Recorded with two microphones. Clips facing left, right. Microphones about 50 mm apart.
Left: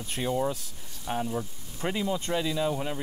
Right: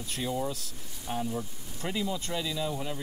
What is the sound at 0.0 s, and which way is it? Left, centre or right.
Speech, left.